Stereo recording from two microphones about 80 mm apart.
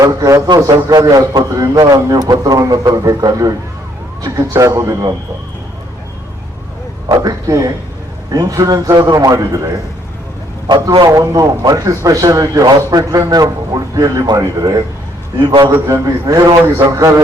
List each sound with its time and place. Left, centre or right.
0.0 s a man's voice: right
0.4 s a man's voice: right
1.6 s a man's voice: right
7.1 s a man's voice: right
11.0 s a man's voice: right
15.4 s a man's voice: right
15.7 s a man's voice: right